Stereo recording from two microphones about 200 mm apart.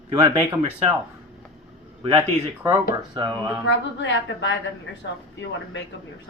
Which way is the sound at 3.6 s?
65° left (ahead or behind).